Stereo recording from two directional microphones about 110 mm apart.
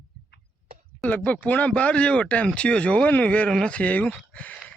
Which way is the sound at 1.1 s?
15° left (ahead or behind).